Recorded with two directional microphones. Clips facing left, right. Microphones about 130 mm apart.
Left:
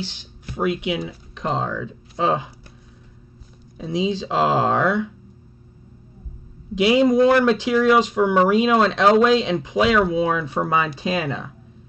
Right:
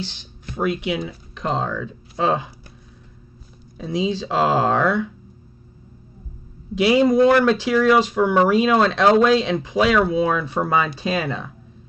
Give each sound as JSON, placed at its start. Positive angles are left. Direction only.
{"t": 0.0, "sound": "speech", "side_deg": 10}
{"t": 3.7, "sound": "speech", "side_deg": 20}
{"t": 6.7, "sound": "speech", "side_deg": 20}